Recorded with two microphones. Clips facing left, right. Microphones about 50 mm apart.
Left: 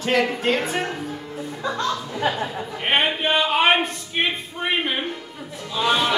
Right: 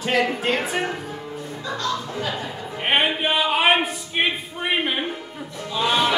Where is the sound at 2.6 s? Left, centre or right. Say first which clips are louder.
Right 1 dB; centre.